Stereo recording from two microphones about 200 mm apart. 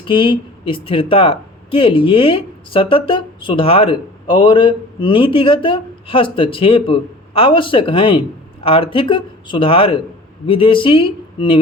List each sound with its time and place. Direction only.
0.0 s speech: 25° left (ahead or behind)